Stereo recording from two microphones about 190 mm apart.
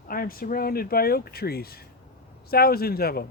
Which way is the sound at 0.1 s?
50° left (ahead or behind).